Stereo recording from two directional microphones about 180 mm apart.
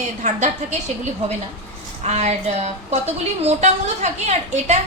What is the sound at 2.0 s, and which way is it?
A woman's voice, 40° right (ahead or behind).